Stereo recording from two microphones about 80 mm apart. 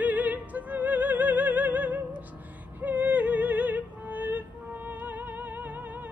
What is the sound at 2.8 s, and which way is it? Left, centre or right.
Music, centre.